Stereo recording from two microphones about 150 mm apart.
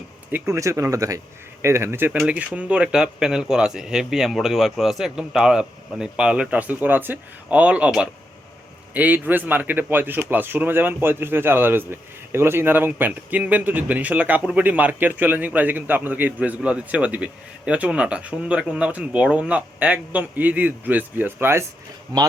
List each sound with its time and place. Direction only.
0.3 s a man's voice: 15° right (ahead or behind)